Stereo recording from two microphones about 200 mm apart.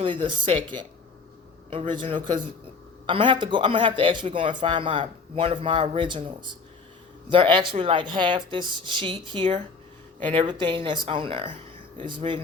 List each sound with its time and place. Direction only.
0.0 s a man's voice: 25° right (ahead or behind)